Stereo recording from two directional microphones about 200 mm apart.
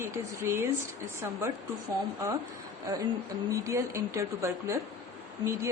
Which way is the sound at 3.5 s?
15° right (ahead or behind).